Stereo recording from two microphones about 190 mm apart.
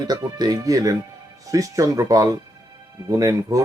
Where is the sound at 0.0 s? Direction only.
20° right (ahead or behind).